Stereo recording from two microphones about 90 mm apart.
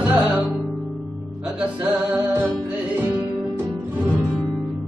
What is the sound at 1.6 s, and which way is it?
Music, 10° right (ahead or behind).